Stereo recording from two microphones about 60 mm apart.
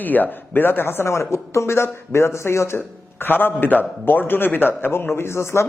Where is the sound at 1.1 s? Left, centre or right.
Left.